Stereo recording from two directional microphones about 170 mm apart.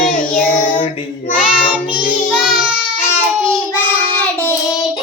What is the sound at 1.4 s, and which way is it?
Child singing, 5° right (ahead or behind).